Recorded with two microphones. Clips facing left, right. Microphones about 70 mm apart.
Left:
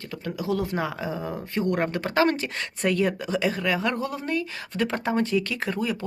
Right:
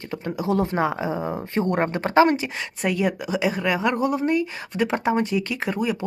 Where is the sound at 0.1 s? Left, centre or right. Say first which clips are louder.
Right 4 dB; right.